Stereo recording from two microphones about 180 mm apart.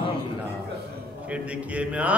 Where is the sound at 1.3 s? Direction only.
5° right (ahead or behind).